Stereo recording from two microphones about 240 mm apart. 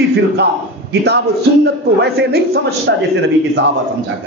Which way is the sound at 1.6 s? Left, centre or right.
Right.